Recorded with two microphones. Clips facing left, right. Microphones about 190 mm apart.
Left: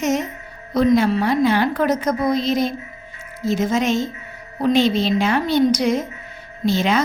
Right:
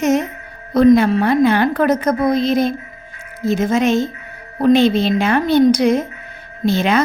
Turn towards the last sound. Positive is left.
turn(degrees=-55)  # may be behind; listen again after turning